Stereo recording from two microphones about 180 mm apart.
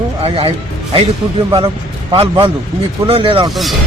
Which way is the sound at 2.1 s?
30° right (ahead or behind).